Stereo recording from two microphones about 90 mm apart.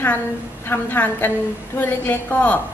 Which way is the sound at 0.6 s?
20° left (ahead or behind).